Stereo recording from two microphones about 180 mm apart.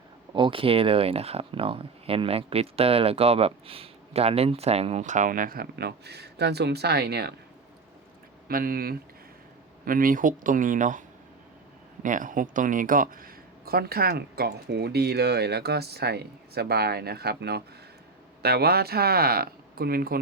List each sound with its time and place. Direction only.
0.3 s speech: 30° right (ahead or behind); by 7.3 s 60° right (ahead or behind)
8.4 s speech: 55° right (ahead or behind)
12.0 s speech: 45° right (ahead or behind)